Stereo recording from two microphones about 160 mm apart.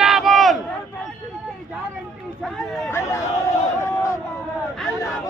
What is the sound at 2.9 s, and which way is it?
Speech, 20° left (ahead or behind).